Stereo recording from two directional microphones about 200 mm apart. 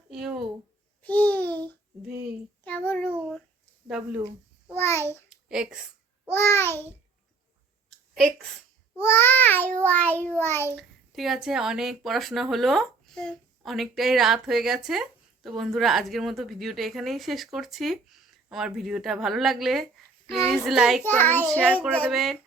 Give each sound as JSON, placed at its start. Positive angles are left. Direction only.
{"t": 0.1, "sound": "a sound", "side_deg": 0}
{"t": 1.0, "sound": "babbling", "side_deg": 5}
{"t": 2.6, "sound": "child singing", "side_deg": 10}
{"t": 3.1, "sound": "babbling", "side_deg": -5}
{"t": 3.8, "sound": "speech", "side_deg": -5}
{"t": 4.2, "sound": "babbling", "side_deg": -30}
{"t": 4.8, "sound": "a child's voice", "side_deg": 10}
{"t": 5.3, "sound": "a sound", "side_deg": -5}
{"t": 6.2, "sound": "child singing", "side_deg": 10}
{"t": 7.9, "sound": "a sound", "side_deg": 5}
{"t": 9.0, "sound": "child singing", "side_deg": 10}
{"t": 10.8, "sound": "a woman's voice", "side_deg": 0}
{"t": 21.0, "sound": "child singing", "side_deg": 10}
{"t": 21.9, "sound": "a woman's voice", "side_deg": 0}